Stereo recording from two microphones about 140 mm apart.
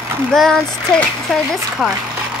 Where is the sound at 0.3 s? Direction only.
5° left (ahead or behind).